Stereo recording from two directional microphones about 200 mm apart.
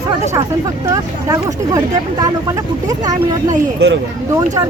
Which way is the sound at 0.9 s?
20° right (ahead or behind).